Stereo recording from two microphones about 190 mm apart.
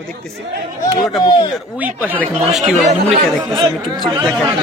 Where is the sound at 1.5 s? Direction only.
5° right (ahead or behind).